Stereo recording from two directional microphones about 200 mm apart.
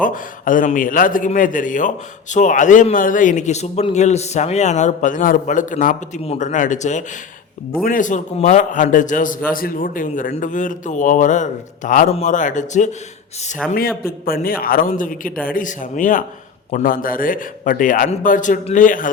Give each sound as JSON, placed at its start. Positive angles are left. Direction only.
{"t": 0.0, "sound": "a man's voice", "side_deg": 40}
{"t": 13.7, "sound": "a man's voice", "side_deg": 50}